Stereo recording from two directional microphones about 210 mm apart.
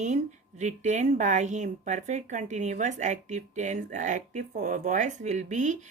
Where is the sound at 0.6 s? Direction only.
35° right (ahead or behind).